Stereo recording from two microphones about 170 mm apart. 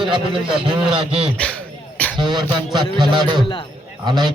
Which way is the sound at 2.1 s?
25° right (ahead or behind).